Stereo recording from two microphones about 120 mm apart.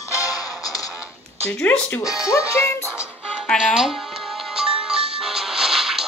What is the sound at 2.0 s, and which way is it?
Speech, 5° right (ahead or behind).